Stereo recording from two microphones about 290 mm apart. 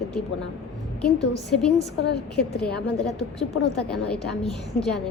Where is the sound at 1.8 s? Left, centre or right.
Left.